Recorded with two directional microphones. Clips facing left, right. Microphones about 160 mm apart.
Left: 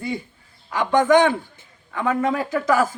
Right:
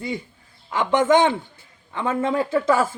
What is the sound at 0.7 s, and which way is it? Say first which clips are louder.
Speech: left 1 dB; 20° right (ahead or behind).